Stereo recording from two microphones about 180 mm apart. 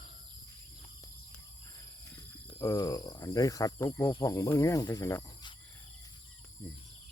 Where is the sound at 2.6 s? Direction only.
15° left (ahead or behind).